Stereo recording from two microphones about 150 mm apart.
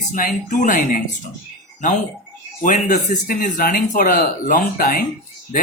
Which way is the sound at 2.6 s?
55° left (ahead or behind).